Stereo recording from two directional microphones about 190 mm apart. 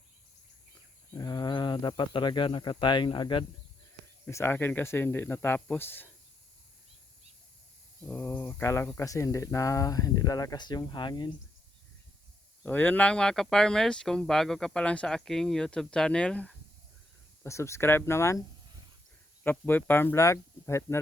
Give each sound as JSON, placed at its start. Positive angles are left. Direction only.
{"t": 1.1, "sound": "speech", "side_deg": 20}
{"t": 4.3, "sound": "speech", "side_deg": 15}
{"t": 8.0, "sound": "speech", "side_deg": 10}
{"t": 12.6, "sound": "speech", "side_deg": 10}
{"t": 19.5, "sound": "speech", "side_deg": 10}